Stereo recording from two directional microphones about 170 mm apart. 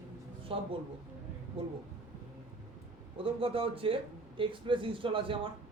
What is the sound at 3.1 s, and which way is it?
Speech, 30° right (ahead or behind).